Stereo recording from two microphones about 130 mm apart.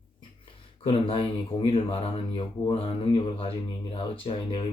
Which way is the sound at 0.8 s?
45° left (ahead or behind).